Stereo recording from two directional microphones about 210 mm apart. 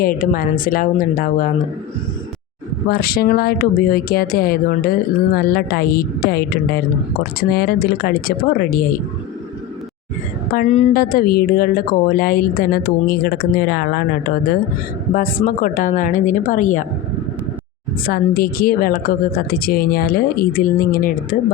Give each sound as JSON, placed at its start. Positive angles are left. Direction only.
{"t": 0.0, "sound": "a woman's voice", "side_deg": 45}
{"t": 2.9, "sound": "speech", "side_deg": 45}
{"t": 10.5, "sound": "a woman's voice", "side_deg": 35}
{"t": 18.0, "sound": "a woman's voice", "side_deg": 45}